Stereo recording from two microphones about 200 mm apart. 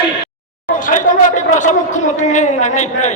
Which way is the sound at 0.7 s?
40° left (ahead or behind).